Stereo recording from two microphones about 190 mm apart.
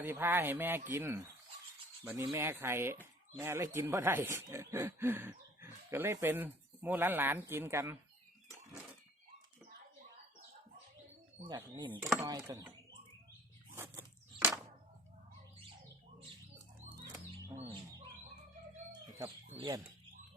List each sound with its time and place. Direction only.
0.0 s speech: 10° right (ahead or behind)
11.4 s speech: 20° right (ahead or behind)
13.7 s walk: 15° right (ahead or behind)
19.5 s speech: 25° right (ahead or behind)